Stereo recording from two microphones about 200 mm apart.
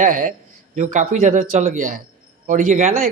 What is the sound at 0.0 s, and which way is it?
A man's voice, 40° right (ahead or behind).